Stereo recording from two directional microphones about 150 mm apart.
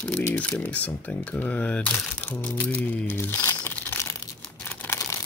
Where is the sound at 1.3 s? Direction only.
10° left (ahead or behind).